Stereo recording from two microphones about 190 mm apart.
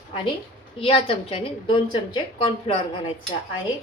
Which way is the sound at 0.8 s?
30° left (ahead or behind).